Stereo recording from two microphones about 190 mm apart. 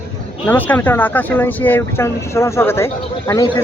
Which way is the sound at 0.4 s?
10° left (ahead or behind).